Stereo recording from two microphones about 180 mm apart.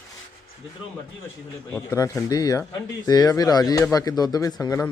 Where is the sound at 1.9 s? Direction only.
20° left (ahead or behind).